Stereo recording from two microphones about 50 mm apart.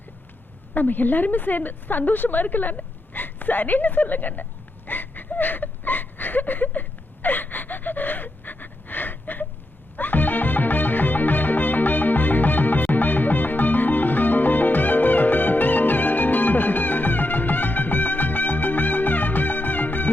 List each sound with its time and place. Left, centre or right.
0.7 s a woman's voice: left
4.9 s a sound: left
10.0 s music: left